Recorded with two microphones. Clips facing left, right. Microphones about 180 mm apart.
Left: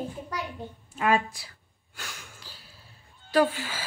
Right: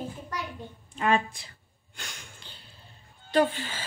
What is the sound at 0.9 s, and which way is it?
Speech, 5° left (ahead or behind).